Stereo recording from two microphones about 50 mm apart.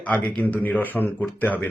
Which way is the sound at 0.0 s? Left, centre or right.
Left.